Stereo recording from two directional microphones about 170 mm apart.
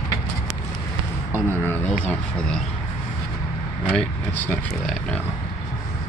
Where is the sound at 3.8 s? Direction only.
10° left (ahead or behind).